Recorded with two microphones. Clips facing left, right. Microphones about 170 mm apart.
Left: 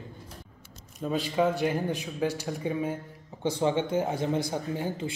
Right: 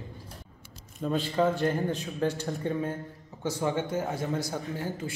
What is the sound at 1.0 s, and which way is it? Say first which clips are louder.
A man's voice: even; 10° left (ahead or behind).